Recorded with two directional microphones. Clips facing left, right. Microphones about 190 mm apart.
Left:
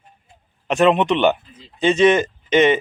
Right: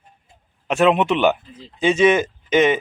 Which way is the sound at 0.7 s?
5° right (ahead or behind).